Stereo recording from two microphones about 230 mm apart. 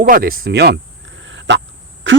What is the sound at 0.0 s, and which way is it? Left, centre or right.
Speech, right.